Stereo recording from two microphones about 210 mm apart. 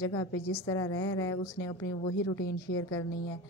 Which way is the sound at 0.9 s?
80° left.